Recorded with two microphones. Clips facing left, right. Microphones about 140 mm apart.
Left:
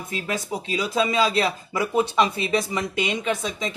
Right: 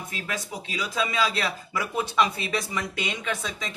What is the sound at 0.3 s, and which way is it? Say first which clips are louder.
Speech: left 7 dB; 30° left (ahead or behind).